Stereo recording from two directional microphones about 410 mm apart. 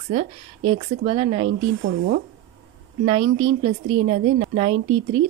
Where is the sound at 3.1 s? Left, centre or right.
Centre.